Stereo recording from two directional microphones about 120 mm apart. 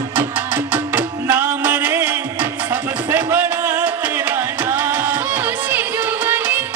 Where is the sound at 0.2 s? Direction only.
15° right (ahead or behind).